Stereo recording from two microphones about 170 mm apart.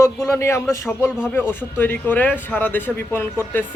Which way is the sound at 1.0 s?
5° right (ahead or behind).